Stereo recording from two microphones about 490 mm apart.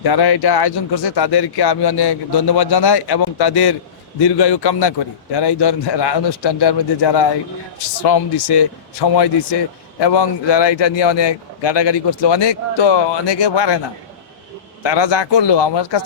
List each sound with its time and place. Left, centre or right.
0.0 s a man's voice: left
14.8 s a man's voice: left